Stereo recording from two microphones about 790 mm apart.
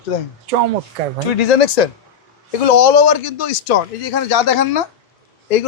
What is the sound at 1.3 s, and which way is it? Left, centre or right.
Speech, left.